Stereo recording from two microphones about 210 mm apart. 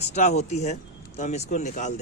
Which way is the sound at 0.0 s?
30° left (ahead or behind).